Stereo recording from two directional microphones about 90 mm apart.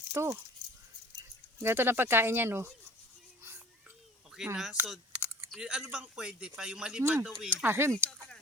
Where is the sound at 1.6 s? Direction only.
25° right (ahead or behind).